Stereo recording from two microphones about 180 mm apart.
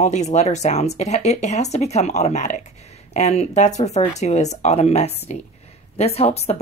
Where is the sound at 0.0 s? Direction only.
40° left (ahead or behind).